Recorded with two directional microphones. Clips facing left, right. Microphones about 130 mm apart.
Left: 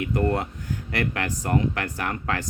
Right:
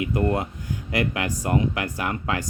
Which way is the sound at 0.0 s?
10° right (ahead or behind).